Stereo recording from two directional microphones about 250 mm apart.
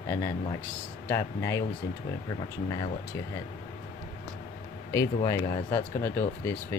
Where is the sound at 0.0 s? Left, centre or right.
Centre.